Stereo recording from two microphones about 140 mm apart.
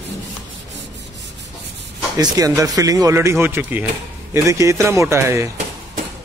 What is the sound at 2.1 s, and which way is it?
Speech, 25° right (ahead or behind).